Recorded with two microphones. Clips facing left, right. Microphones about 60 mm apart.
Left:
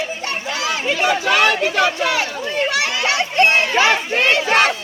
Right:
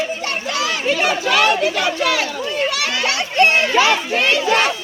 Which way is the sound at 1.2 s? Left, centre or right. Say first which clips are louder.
Right 2 dB; left.